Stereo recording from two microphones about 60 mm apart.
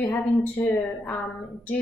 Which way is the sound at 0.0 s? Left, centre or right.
Left.